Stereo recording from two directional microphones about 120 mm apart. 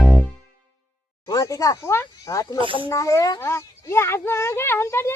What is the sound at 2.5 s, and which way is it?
Speech, 45° right (ahead or behind).